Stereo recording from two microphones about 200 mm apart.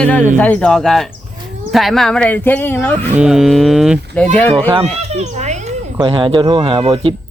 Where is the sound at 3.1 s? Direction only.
5° right (ahead or behind).